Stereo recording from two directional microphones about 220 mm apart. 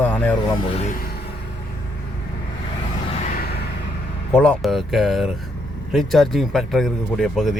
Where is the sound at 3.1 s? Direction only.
35° left (ahead or behind).